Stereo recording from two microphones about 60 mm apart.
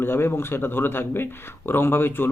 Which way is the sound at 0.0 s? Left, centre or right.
Left.